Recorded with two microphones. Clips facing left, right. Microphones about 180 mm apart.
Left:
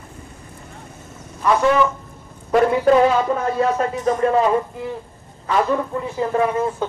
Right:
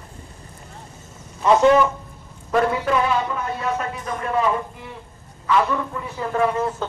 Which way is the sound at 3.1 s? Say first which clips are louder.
Left 6 dB; 45° left (ahead or behind).